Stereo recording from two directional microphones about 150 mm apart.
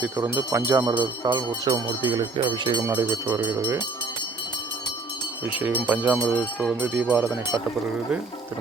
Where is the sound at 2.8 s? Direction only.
15° right (ahead or behind).